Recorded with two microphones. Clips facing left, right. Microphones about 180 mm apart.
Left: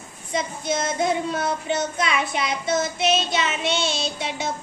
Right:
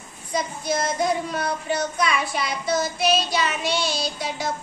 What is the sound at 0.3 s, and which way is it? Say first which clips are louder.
Child singing: even; 25° left (ahead or behind).